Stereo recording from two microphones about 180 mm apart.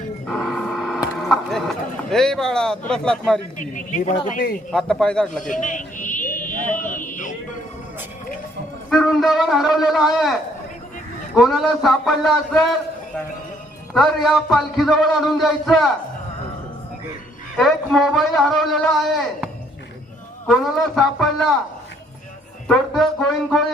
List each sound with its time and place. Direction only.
0.3 s a sound: centre (ahead or behind)
1.3 s speech: centre (ahead or behind)
3.6 s a man's voice: 45° left (ahead or behind)
4.7 s a man's voice: 5° left (ahead or behind)
5.4 s a sound: 45° left (ahead or behind)
8.9 s a man's voice: centre (ahead or behind)
11.3 s a man's voice: centre (ahead or behind)
13.9 s a man's voice: centre (ahead or behind)
17.6 s a man's voice: centre (ahead or behind)
20.5 s a man's voice: centre (ahead or behind)
22.6 s a man's voice: centre (ahead or behind)